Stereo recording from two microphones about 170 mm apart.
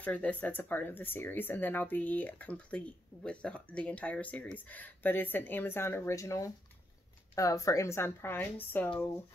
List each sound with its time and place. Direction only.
0.0 s speech: 10° left (ahead or behind)